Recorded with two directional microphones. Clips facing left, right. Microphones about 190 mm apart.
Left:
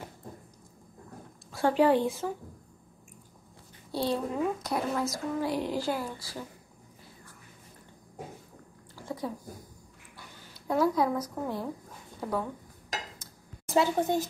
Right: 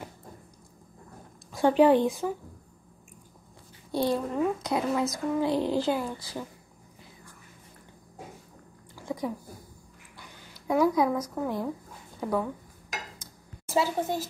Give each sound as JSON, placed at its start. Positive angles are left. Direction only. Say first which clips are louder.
{"t": 1.5, "sound": "speech", "louder": "right 3 dB", "side_deg": -20}
{"t": 3.9, "sound": "a child's voice", "louder": "right 3 dB", "side_deg": -15}
{"t": 8.9, "sound": "a sound", "louder": "right 3 dB", "side_deg": -15}
{"t": 10.7, "sound": "a woman's voice", "louder": "right 2 dB", "side_deg": -10}
{"t": 13.7, "sound": "a woman's voice", "louder": "left 1 dB", "side_deg": -5}